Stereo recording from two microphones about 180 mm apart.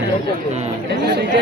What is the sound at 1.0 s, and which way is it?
Speech, 70° right (ahead or behind).